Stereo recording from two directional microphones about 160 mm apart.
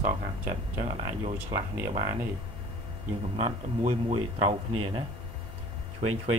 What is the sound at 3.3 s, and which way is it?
Speech, 45° right (ahead or behind).